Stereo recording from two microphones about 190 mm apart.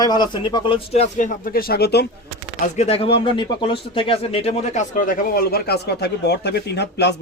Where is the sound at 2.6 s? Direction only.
35° left (ahead or behind).